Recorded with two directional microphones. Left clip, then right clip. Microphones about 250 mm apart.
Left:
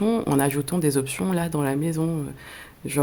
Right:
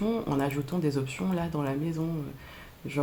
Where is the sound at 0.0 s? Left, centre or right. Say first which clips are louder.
Left 7 dB; left.